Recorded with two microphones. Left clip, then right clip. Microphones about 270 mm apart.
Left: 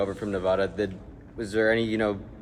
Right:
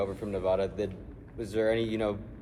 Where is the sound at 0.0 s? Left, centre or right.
Left.